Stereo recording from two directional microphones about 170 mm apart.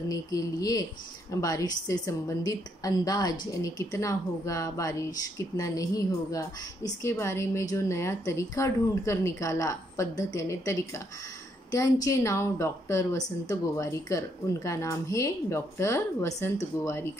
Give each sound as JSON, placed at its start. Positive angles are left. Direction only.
{"t": 0.1, "sound": "a woman's voice", "side_deg": 20}